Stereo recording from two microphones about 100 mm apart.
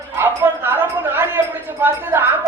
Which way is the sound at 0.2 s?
20° right (ahead or behind).